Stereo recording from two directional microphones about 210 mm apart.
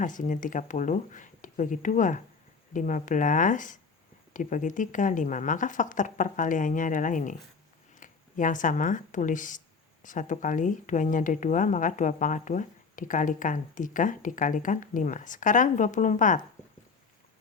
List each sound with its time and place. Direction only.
0.0 s speech: 35° left (ahead or behind)